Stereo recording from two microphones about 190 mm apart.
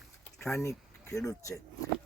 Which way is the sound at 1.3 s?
15° left (ahead or behind).